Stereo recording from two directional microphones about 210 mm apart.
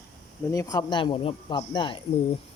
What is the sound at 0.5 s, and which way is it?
Speech, 15° left (ahead or behind).